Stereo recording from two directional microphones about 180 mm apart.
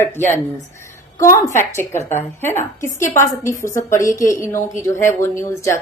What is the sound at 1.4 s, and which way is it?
A woman's voice, 15° left (ahead or behind).